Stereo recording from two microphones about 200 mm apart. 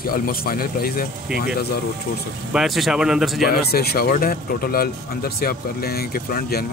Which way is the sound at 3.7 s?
50° left (ahead or behind).